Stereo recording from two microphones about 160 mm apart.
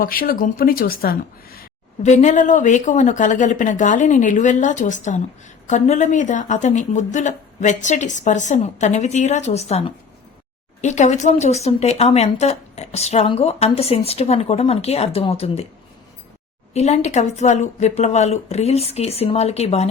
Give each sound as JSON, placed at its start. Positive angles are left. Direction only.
{"t": 0.0, "sound": "speech", "side_deg": 65}
{"t": 2.0, "sound": "a woman's voice", "side_deg": 50}
{"t": 16.7, "sound": "speech", "side_deg": 40}